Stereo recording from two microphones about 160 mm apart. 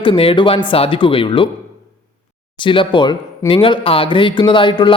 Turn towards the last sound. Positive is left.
turn(degrees=30)  # may be behind; listen again after turning